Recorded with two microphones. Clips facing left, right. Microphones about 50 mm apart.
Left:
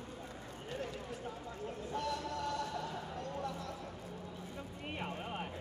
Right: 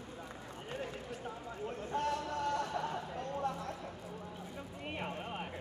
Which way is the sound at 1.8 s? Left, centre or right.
Right.